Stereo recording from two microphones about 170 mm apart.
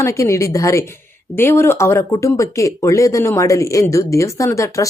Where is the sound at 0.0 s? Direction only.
15° left (ahead or behind).